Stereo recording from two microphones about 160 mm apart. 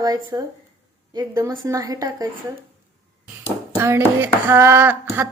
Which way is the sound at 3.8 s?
15° right (ahead or behind).